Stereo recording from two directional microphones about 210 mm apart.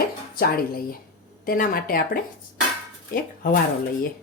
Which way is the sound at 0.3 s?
45° left (ahead or behind).